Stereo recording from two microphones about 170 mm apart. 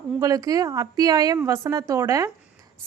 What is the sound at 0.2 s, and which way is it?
A woman's voice, 20° right (ahead or behind).